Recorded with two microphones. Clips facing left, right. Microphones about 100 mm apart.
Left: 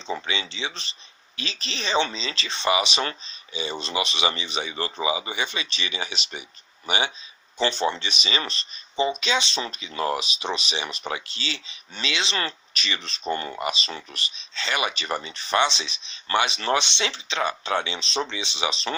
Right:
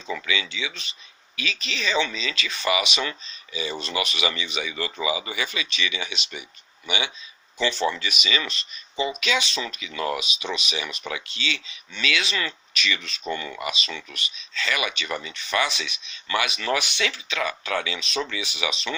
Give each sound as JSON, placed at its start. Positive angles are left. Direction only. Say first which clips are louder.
{"t": 0.1, "sound": "speech", "louder": "right 1 dB", "side_deg": 30}
{"t": 7.6, "sound": "speech", "louder": "even", "side_deg": 25}